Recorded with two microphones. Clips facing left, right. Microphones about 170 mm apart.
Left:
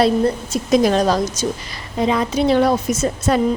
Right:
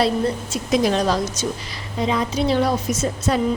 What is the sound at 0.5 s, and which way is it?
A woman's voice, 45° left (ahead or behind).